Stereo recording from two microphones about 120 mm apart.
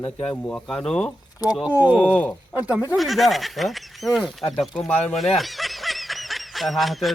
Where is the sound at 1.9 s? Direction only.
10° left (ahead or behind).